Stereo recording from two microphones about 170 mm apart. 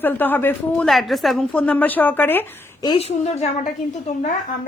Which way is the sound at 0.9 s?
Centre (ahead or behind).